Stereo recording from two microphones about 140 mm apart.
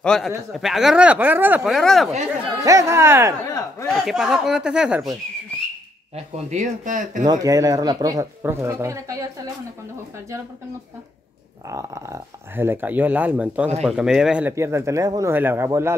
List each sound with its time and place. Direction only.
0.0 s speech: 5° left (ahead or behind); by 1.7 s 15° right (ahead or behind)
1.7 s speech: centre (ahead or behind)
2.6 s speech: 25° right (ahead or behind)
3.8 s speech: centre (ahead or behind)
6.1 s speech: 50° right (ahead or behind)
7.2 s speech: 25° right (ahead or behind)
11.7 s speech: 20° right (ahead or behind); by 14.5 s 5° right (ahead or behind)
14.5 s speech: 20° right (ahead or behind)